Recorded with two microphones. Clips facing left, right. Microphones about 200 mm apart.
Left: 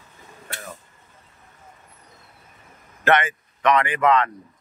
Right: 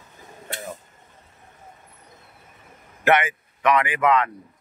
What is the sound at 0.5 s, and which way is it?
Vehicle, 20° right (ahead or behind).